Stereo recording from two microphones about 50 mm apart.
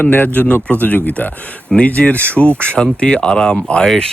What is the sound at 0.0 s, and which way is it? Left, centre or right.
Speech, left.